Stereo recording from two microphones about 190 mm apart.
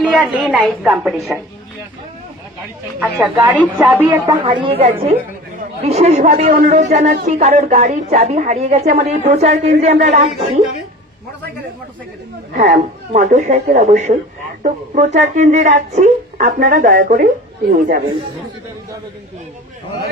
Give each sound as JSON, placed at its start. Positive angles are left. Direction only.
{"t": 0.0, "sound": "a woman's voice", "side_deg": 5}
{"t": 3.0, "sound": "speech", "side_deg": -5}
{"t": 4.4, "sound": "a woman's voice", "side_deg": -25}
{"t": 12.5, "sound": "speech", "side_deg": -40}